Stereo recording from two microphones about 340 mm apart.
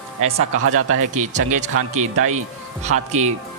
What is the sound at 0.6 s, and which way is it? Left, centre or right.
Speech, right.